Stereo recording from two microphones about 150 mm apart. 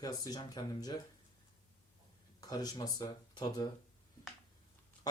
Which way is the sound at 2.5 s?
25° left (ahead or behind).